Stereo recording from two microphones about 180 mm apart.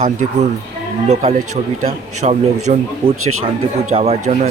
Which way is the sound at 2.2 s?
40° right (ahead or behind).